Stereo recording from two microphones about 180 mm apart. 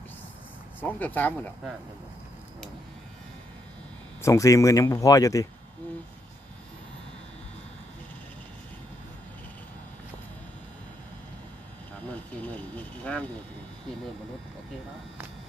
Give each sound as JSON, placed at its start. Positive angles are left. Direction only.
{"t": 0.8, "sound": "speech", "side_deg": 10}
{"t": 4.2, "sound": "speech", "side_deg": 15}
{"t": 11.9, "sound": "speech", "side_deg": 10}